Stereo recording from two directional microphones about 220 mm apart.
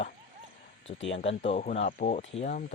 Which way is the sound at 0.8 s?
60° left (ahead or behind).